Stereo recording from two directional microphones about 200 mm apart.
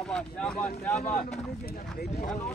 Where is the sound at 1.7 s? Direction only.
45° left (ahead or behind).